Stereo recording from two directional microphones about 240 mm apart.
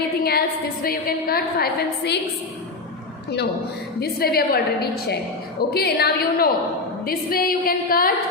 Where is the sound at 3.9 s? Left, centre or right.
Left.